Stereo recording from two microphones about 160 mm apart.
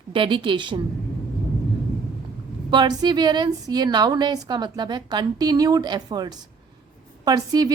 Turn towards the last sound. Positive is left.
turn(degrees=-25)  # may be behind; listen again after turning